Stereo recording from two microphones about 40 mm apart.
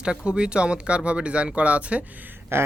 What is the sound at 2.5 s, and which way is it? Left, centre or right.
Speech, right.